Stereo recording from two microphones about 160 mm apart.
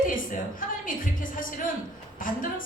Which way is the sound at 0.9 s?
60° left (ahead or behind).